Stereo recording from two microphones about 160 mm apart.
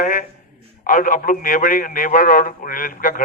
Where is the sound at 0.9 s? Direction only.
55° left (ahead or behind).